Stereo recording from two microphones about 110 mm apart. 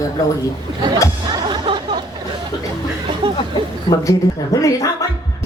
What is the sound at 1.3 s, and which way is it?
Music, 45° right (ahead or behind).